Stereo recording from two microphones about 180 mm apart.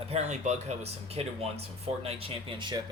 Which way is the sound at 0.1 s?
40° right (ahead or behind).